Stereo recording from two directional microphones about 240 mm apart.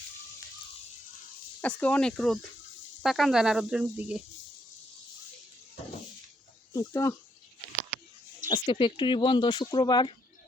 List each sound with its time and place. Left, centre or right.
1.6 s cricket: centre
6.7 s speech: centre
8.4 s speech: centre